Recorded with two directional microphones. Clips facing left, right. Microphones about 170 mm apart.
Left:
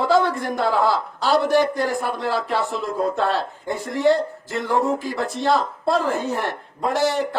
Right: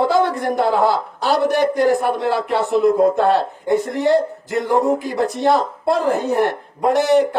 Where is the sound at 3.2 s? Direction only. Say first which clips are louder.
Right 6 dB; 55° right (ahead or behind).